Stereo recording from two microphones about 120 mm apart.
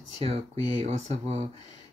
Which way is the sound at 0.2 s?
50° right (ahead or behind).